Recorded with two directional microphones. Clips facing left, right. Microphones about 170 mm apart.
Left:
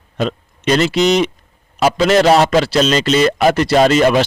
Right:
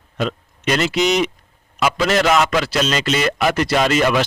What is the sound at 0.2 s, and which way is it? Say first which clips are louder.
A man's voice: left 3 dB; 30° left (ahead or behind).